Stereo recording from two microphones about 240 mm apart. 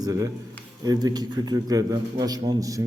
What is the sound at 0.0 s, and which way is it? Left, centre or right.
A man's voice, centre.